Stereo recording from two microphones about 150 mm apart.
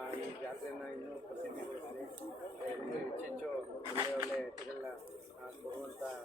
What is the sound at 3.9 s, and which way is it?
Speech, 30° right (ahead or behind).